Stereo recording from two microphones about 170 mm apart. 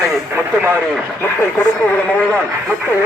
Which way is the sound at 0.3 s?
10° right (ahead or behind).